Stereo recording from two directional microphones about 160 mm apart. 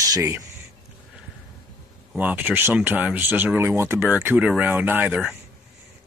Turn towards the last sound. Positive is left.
turn(degrees=-5)  # may be behind; listen again after turning